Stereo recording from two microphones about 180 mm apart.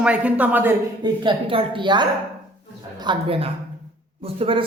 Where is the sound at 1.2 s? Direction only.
30° right (ahead or behind).